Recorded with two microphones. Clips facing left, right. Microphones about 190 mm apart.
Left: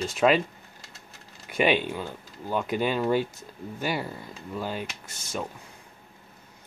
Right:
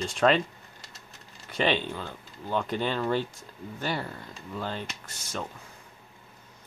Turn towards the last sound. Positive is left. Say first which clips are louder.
# left 2 dB
turn(degrees=10)  # may be behind; listen again after turning